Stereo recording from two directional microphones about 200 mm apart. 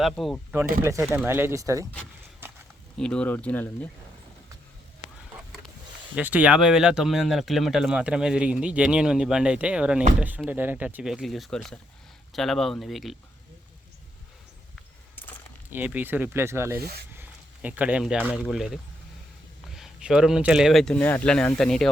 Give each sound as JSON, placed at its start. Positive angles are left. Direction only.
{"t": 0.0, "sound": "speech", "side_deg": 0}
{"t": 0.8, "sound": "speech", "side_deg": -15}
{"t": 2.4, "sound": "a sound", "side_deg": -10}
{"t": 3.0, "sound": "speech", "side_deg": 5}
{"t": 6.1, "sound": "speech", "side_deg": -5}
{"t": 15.7, "sound": "speech", "side_deg": -10}
{"t": 16.8, "sound": "speech", "side_deg": -50}
{"t": 17.2, "sound": "speech", "side_deg": -5}